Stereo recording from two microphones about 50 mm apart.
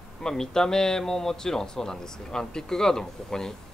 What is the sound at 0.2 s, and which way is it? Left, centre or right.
A man's voice, centre.